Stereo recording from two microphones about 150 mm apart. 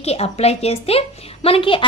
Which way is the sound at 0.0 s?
45° left (ahead or behind).